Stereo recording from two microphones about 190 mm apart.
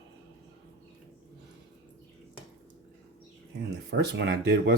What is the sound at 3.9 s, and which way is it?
Speech, 65° right (ahead or behind).